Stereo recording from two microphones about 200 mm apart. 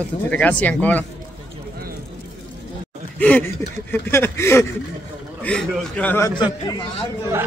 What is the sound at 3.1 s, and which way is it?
Speech, 10° left (ahead or behind).